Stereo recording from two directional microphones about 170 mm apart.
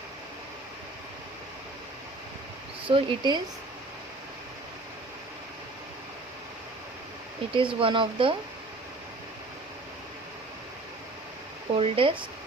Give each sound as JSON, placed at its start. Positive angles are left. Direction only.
{"t": 2.8, "sound": "speech", "side_deg": -30}
{"t": 7.5, "sound": "speech", "side_deg": -30}
{"t": 11.7, "sound": "speech", "side_deg": -30}